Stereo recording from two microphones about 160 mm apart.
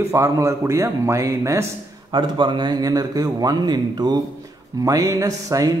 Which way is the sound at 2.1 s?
30° right (ahead or behind).